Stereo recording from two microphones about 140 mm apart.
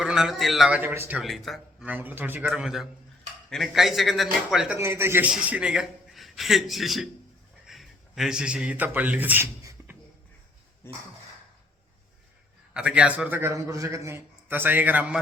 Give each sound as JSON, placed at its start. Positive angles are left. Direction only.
{"t": 0.0, "sound": "a man's voice", "side_deg": -5}
{"t": 0.8, "sound": "a man's voice", "side_deg": -15}
{"t": 1.2, "sound": "a man's voice", "side_deg": 0}
{"t": 1.9, "sound": "a man's voice", "side_deg": -15}
{"t": 4.8, "sound": "a man's voice", "side_deg": -15}
{"t": 10.8, "sound": "speech", "side_deg": 15}
{"t": 12.7, "sound": "a man's voice", "side_deg": -10}